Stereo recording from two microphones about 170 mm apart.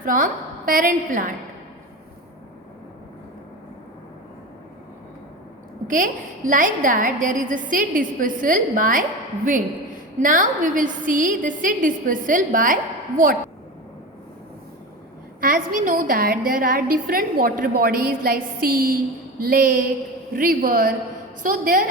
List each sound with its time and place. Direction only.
0.0 s a woman's voice: 55° right (ahead or behind)
5.9 s a woman's voice: 50° right (ahead or behind)
15.4 s a woman's voice: 55° right (ahead or behind)